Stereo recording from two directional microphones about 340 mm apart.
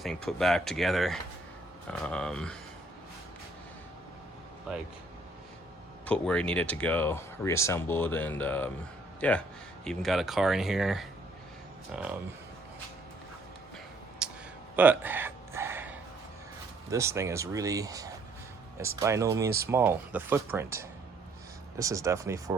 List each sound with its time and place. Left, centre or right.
0.0 s speech: centre
4.7 s speech: centre
6.1 s speech: centre
14.2 s a sound: centre
14.8 s gasp: centre
16.9 s speech: centre